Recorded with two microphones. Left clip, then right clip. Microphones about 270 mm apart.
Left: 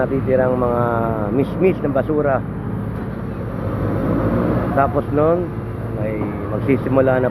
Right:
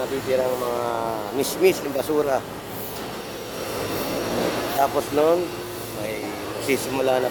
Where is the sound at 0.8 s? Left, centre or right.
Right.